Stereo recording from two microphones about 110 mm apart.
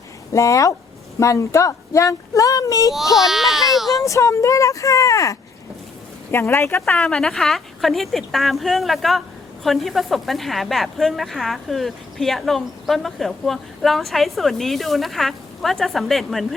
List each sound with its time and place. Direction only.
0.3 s speech: 30° left (ahead or behind)
3.2 s speech: 5° right (ahead or behind)
4.0 s speech: 30° left (ahead or behind)
6.8 s speech: 5° left (ahead or behind)